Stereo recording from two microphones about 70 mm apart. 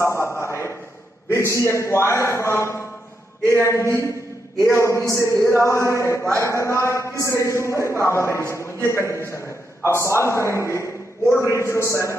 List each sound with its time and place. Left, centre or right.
0.0 s a sound: left
1.3 s a man's voice: left
4.6 s a man's voice: left